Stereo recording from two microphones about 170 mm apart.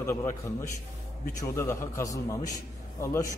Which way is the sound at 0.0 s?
15° left (ahead or behind).